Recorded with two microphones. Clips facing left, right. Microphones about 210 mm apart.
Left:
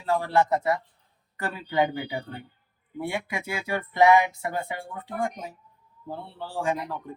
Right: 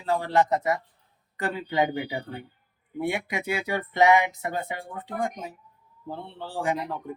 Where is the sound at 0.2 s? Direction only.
20° right (ahead or behind).